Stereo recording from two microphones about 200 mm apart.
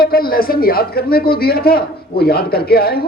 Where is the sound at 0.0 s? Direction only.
50° left (ahead or behind).